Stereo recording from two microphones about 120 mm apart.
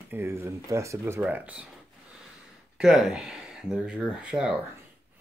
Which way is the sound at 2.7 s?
5° right (ahead or behind).